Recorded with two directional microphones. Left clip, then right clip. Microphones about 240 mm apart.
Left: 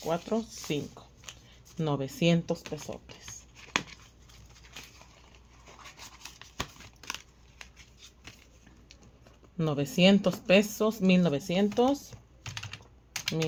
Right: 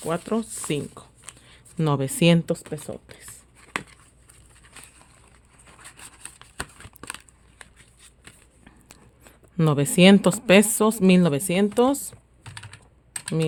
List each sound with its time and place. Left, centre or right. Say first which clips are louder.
0.0 s speech: right 4 dB; right
1.0 s shuffling cards: right 6 dB; right
1.5 s speech: right 7 dB; right
3.2 s whispering: left 1 dB; centre
5.8 s a sound: right 2 dB; right
7.6 s shuffling cards: right 1 dB; centre
9.2 s speech: right 8 dB; right